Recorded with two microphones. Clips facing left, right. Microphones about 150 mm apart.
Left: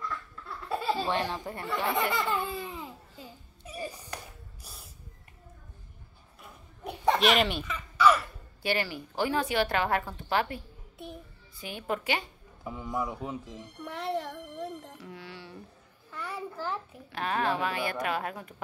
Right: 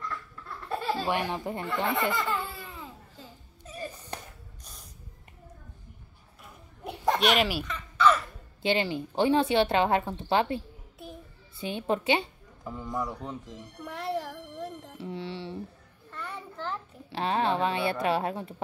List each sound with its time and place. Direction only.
0.7 s laughter: 5° left (ahead or behind)
1.0 s speech: 15° right (ahead or behind)
2.1 s laughter: 15° left (ahead or behind)
3.6 s a sound: 10° left (ahead or behind)
6.4 s a sound: centre (ahead or behind)
7.6 s crow: 10° left (ahead or behind)
8.6 s speech: 20° right (ahead or behind)
11.0 s child singing: centre (ahead or behind)
11.6 s speech: 25° right (ahead or behind)
12.6 s speech: 5° left (ahead or behind)
15.0 s a sound: 25° right (ahead or behind)
16.1 s a sound: 5° left (ahead or behind)
17.1 s speech: 25° right (ahead or behind)